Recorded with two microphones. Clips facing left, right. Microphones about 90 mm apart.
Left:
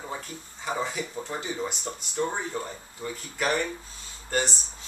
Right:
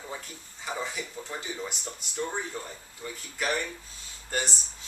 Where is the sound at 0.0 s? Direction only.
35° left (ahead or behind).